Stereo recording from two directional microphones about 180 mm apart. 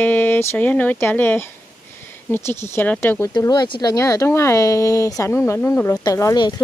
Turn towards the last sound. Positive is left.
turn(degrees=20)  # may be behind; listen again after turning